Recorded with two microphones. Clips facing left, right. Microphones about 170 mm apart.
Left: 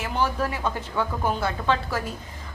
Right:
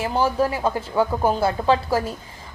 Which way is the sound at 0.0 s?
30° right (ahead or behind).